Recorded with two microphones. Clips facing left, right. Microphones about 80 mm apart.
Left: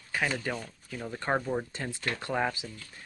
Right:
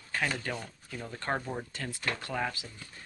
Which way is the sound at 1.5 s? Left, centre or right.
Left.